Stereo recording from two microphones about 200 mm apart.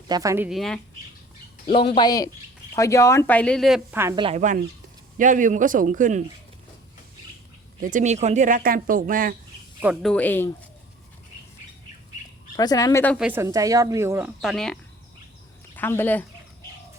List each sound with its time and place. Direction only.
0.1 s speech: 15° right (ahead or behind); by 0.8 s centre (ahead or behind)
1.6 s speech: 25° left (ahead or behind); by 3.8 s centre (ahead or behind)
3.9 s speech: 15° right (ahead or behind)
4.4 s speech: 40° right (ahead or behind)
7.8 s speech: 40° right (ahead or behind)
9.8 s speech: centre (ahead or behind)
12.5 s speech: 20° left (ahead or behind)
13.1 s speech: 10° right (ahead or behind)
14.4 s speech: centre (ahead or behind)